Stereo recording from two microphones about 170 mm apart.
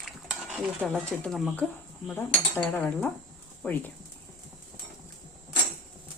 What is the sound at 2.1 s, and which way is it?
Cutlery, 10° left (ahead or behind).